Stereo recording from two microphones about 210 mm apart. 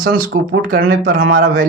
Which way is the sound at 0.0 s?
45° right (ahead or behind).